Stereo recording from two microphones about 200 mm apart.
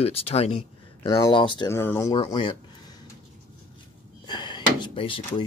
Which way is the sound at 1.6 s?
10° left (ahead or behind).